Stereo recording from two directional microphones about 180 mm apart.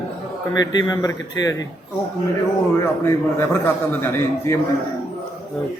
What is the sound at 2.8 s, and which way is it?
A man's voice, 15° left (ahead or behind).